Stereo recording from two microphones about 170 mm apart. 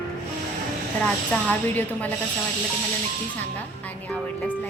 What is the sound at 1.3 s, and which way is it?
Speech, 10° left (ahead or behind).